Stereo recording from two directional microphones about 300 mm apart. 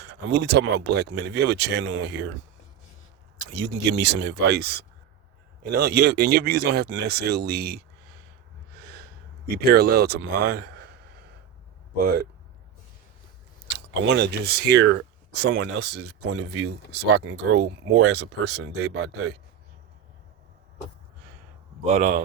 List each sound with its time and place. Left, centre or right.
0.1 s speech: right
3.5 s speech: right
8.8 s snort: right
9.6 s a man's voice: right
11.9 s speech: right
13.7 s speech: right
15.6 s speech: right
17.2 s speech: right
21.8 s speech: right